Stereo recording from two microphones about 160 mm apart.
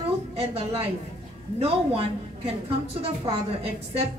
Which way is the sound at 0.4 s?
40° right (ahead or behind).